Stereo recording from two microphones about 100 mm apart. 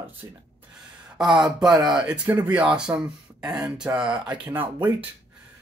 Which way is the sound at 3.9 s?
20° right (ahead or behind).